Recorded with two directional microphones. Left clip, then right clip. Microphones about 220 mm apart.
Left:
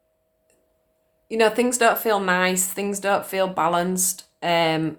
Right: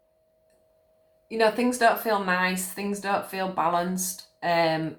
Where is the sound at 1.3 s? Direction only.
50° left (ahead or behind).